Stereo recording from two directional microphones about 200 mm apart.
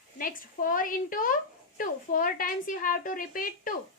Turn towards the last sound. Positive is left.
turn(degrees=45)  # may be behind; listen again after turning